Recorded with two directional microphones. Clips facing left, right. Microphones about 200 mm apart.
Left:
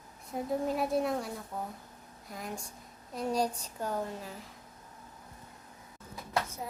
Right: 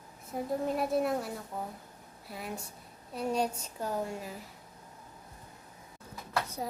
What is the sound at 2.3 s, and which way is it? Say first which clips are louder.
A woman's voice: right 1 dB; 5° right (ahead or behind).